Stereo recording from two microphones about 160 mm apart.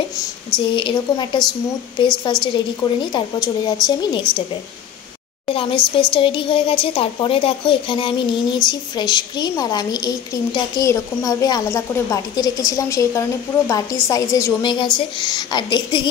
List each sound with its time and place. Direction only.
0.7 s a woman's voice: 30° left (ahead or behind)
2.4 s a woman's voice: 30° left (ahead or behind)
5.5 s a woman's voice: 35° left (ahead or behind)